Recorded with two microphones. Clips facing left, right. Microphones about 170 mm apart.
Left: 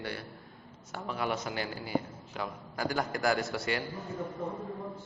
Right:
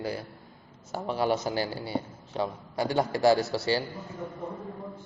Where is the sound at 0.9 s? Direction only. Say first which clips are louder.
Right 6 dB; 35° right (ahead or behind).